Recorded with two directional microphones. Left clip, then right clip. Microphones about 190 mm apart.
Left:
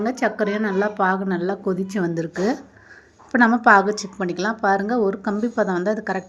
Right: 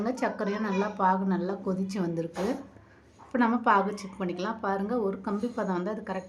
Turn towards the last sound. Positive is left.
turn(degrees=20)  # may be behind; listen again after turning